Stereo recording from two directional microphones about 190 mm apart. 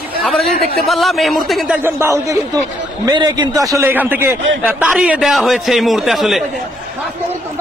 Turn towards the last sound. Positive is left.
turn(degrees=0)  # may be behind; listen again after turning